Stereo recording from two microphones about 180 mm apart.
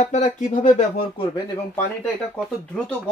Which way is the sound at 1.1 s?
25° left (ahead or behind).